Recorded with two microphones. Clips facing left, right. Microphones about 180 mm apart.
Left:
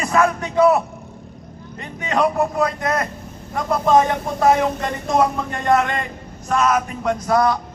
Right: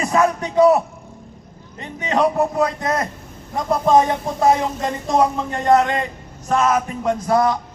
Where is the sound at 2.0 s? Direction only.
20° right (ahead or behind).